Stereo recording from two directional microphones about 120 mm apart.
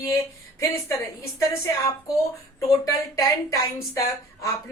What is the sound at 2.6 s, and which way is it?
Speech, 25° left (ahead or behind).